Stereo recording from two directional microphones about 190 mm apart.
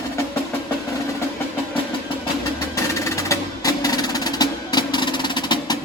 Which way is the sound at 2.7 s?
15° left (ahead or behind).